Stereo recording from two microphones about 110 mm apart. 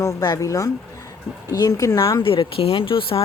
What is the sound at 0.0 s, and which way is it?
Speech, 35° left (ahead or behind).